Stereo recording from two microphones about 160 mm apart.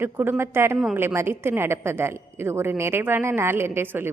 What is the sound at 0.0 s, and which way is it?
A woman's voice, 15° right (ahead or behind).